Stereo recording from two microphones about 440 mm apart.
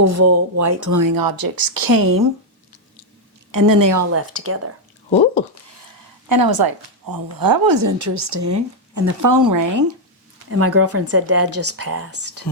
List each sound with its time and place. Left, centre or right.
0.0 s speech: right
3.5 s speech: right
4.1 s speech: right
6.2 s speech: right
10.5 s speech: right